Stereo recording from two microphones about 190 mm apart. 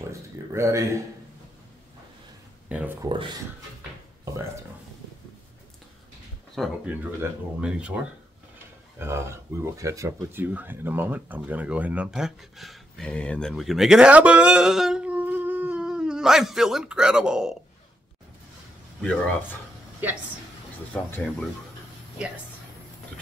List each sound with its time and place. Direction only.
0.1 s speech: 15° right (ahead or behind)
2.7 s speech: 10° right (ahead or behind)
6.6 s speech: centre (ahead or behind)
19.0 s speech: 5° left (ahead or behind)
20.9 s speech: 5° left (ahead or behind)